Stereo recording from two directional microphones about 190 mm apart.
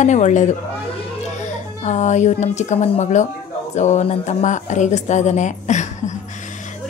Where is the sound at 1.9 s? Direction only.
40° left (ahead or behind).